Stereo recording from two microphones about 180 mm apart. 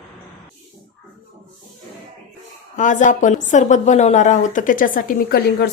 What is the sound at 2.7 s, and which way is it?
A woman's voice, 45° left (ahead or behind).